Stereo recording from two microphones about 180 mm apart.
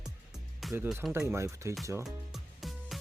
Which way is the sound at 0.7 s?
5° right (ahead or behind).